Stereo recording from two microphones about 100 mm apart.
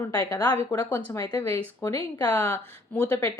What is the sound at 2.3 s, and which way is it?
Speech, 20° left (ahead or behind).